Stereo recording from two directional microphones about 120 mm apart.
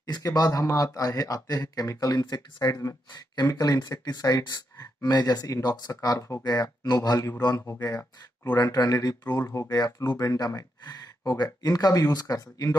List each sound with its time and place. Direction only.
0.0 s a man's voice: 35° left (ahead or behind)